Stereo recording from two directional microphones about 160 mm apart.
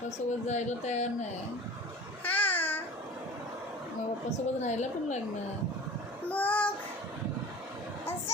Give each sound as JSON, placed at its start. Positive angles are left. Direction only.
{"t": 0.4, "sound": "speech", "side_deg": 45}
{"t": 2.2, "sound": "babbling", "side_deg": 10}
{"t": 4.6, "sound": "speech", "side_deg": 45}
{"t": 6.2, "sound": "child singing", "side_deg": 10}